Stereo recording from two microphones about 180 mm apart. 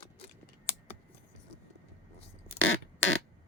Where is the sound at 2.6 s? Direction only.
90° left.